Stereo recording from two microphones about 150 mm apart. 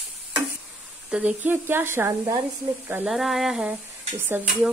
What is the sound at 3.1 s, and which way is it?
Speech, centre (ahead or behind).